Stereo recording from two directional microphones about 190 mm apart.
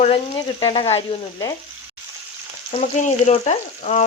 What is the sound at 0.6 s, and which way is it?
Speech, 25° left (ahead or behind).